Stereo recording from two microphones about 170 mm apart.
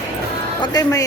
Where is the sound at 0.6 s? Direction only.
20° left (ahead or behind).